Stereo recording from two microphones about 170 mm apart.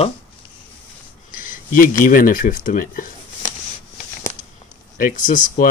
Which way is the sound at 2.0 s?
55° left (ahead or behind).